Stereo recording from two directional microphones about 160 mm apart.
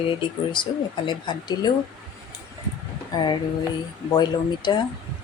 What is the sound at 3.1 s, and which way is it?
Speech, 30° left (ahead or behind).